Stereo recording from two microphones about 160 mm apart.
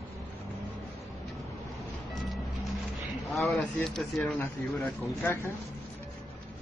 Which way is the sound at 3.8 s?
Centre (ahead or behind).